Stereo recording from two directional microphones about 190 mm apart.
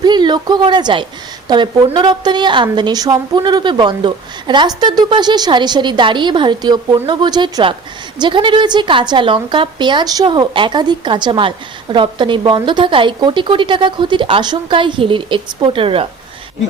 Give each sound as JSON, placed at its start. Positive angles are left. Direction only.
{"t": 0.0, "sound": "a woman's voice", "side_deg": -25}